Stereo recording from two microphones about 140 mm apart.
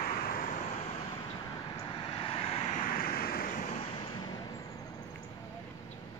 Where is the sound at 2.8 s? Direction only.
85° left.